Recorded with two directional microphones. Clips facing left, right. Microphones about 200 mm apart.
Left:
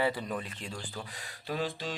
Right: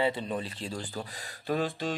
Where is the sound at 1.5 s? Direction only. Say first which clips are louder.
Right 4 dB; 50° right (ahead or behind).